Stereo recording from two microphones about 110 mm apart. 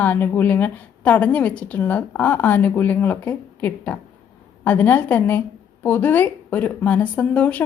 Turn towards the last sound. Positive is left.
turn(degrees=15)  # may be behind; listen again after turning